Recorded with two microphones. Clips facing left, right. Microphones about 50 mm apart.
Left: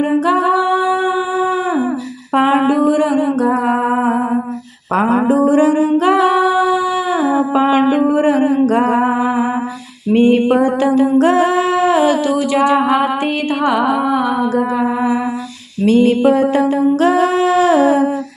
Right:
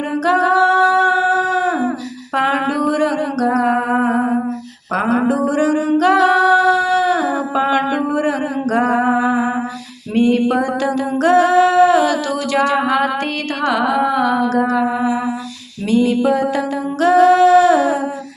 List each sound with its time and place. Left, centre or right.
0.3 s humming: centre
2.3 s a sound: left
4.9 s humming: left
8.7 s music: left
10.1 s singing: left
12.5 s a sound: centre
13.6 s music: centre
15.8 s humming: left